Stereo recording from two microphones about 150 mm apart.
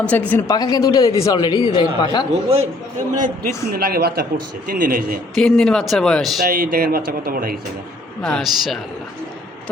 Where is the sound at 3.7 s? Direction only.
85° right.